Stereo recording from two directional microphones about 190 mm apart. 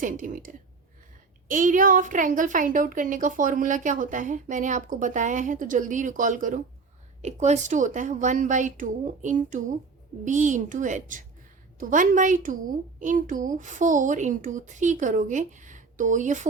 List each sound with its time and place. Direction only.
0.0 s a woman's voice: 45° right (ahead or behind)